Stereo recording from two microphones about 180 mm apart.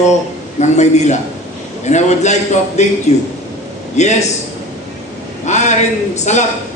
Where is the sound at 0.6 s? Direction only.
40° left (ahead or behind).